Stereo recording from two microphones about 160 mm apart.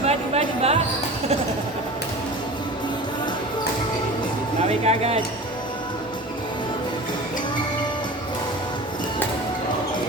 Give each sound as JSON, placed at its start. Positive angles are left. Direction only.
{"t": 0.0, "sound": "music", "side_deg": -40}
{"t": 4.9, "sound": "speech", "side_deg": -40}